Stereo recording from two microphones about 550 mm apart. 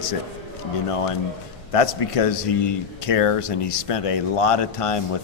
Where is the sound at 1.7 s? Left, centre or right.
Left.